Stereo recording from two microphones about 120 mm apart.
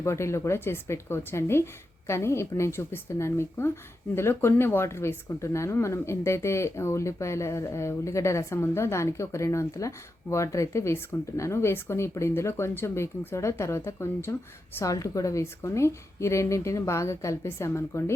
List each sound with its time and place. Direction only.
0.0 s speech: 25° left (ahead or behind)